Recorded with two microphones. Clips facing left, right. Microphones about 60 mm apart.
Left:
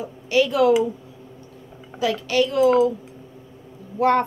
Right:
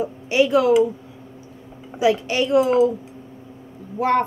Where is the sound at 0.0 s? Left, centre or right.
Right.